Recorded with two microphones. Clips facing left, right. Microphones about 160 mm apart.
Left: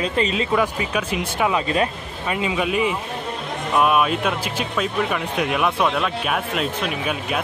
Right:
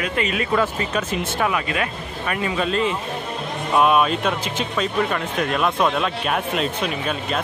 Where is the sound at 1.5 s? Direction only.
30° left (ahead or behind).